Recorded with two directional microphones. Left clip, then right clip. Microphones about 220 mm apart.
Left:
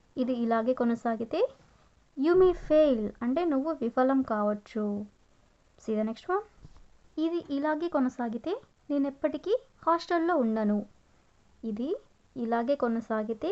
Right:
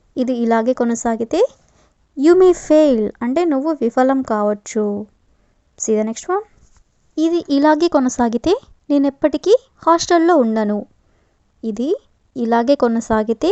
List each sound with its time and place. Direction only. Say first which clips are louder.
0.1 s a woman's voice: right 12 dB; 35° right (ahead or behind)